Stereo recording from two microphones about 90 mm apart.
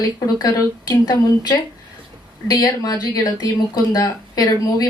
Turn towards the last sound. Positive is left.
turn(degrees=45)  # may be behind; listen again after turning